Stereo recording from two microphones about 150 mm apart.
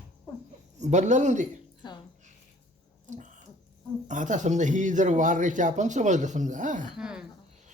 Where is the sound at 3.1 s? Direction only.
55° right (ahead or behind).